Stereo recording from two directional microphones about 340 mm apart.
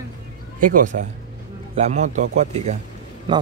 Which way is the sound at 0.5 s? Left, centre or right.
Right.